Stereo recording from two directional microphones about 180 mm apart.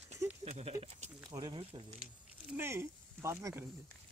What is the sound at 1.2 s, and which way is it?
Speech, 20° right (ahead or behind).